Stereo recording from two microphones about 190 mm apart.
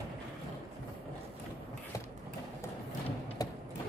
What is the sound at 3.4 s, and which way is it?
Music, 20° left (ahead or behind).